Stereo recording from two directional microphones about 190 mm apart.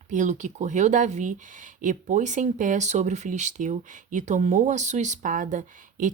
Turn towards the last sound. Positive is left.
turn(degrees=-40)  # may be behind; listen again after turning